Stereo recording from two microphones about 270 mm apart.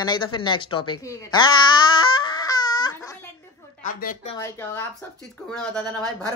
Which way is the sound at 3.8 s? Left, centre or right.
Left.